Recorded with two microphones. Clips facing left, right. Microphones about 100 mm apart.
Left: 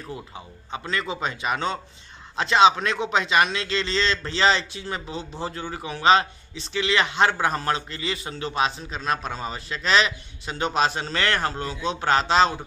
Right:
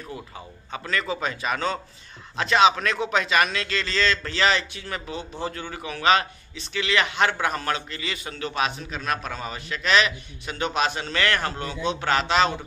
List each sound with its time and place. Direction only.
0.7 s a man's voice: 25° left (ahead or behind)